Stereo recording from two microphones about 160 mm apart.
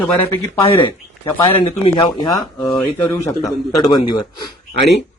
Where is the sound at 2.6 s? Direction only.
5° left (ahead or behind).